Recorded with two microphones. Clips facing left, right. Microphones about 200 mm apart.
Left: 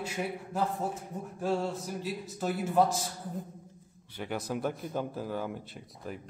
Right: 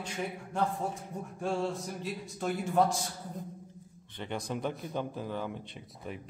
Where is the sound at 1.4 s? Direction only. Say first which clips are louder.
Left 1 dB; centre (ahead or behind).